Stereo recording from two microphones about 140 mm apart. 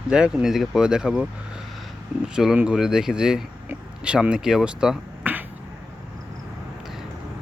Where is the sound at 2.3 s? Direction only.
5° right (ahead or behind).